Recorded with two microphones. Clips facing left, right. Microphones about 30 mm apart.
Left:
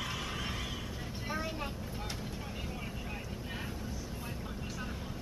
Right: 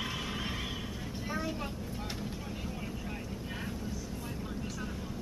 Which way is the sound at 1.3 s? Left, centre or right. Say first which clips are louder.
Right 1 dB; centre.